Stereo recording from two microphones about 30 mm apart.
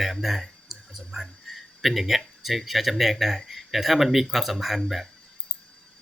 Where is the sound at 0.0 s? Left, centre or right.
Centre.